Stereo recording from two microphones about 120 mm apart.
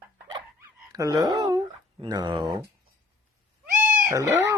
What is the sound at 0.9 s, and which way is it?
Speech, 30° right (ahead or behind).